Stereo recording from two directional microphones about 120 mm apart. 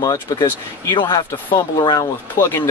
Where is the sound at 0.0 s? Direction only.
30° left (ahead or behind).